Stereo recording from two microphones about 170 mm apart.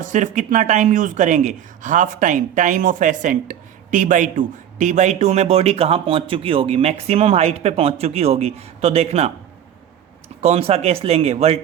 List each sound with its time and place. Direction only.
0.0 s speech: 50° right (ahead or behind)
10.4 s speech: 35° right (ahead or behind)